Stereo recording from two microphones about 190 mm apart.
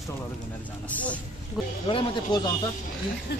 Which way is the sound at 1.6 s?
Centre (ahead or behind).